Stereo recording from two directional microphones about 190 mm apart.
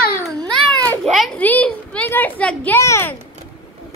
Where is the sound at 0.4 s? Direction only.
5° left (ahead or behind).